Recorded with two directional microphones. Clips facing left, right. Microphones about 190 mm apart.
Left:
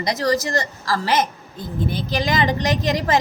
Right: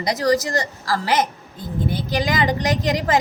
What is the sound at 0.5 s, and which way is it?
A woman's voice, 15° right (ahead or behind).